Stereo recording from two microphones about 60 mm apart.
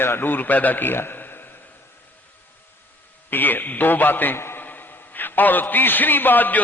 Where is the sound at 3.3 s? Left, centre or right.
Left.